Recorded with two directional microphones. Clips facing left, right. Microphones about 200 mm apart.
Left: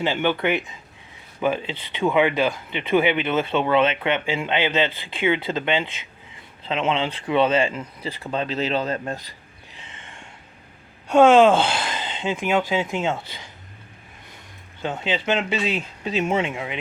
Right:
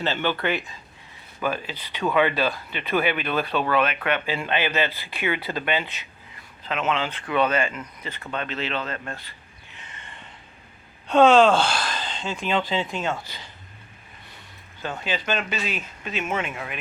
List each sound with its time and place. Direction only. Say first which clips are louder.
0.0 s speech: left 3 dB; 15° left (ahead or behind); by 9.3 s 40° left (ahead or behind)
11.1 s speech: left 2 dB; 15° left (ahead or behind)
14.8 s speech: left 4 dB; 20° left (ahead or behind)